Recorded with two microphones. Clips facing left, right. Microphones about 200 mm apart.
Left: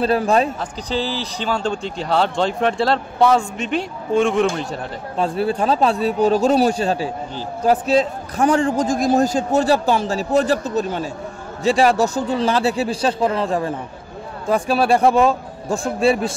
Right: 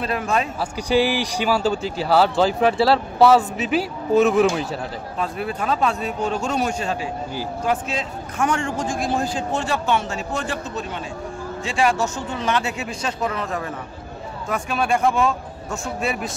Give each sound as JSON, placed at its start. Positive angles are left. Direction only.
{"t": 0.0, "sound": "a man's voice", "side_deg": 35}
{"t": 0.6, "sound": "speech", "side_deg": -10}
{"t": 5.1, "sound": "a man's voice", "side_deg": 30}